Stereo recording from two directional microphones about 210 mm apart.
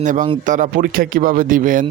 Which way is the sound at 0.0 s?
40° right (ahead or behind).